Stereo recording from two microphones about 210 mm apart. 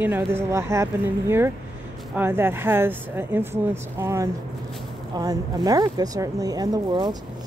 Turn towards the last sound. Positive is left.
turn(degrees=-20)  # may be behind; listen again after turning